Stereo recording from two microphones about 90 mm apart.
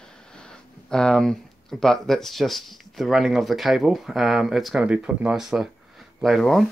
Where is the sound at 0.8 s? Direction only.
10° left (ahead or behind).